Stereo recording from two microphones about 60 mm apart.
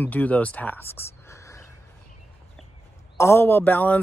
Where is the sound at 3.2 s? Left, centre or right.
Left.